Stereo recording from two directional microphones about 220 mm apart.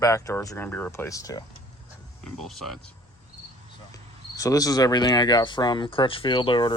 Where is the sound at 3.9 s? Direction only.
15° left (ahead or behind).